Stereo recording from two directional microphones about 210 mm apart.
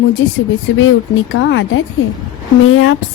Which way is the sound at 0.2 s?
70° left (ahead or behind).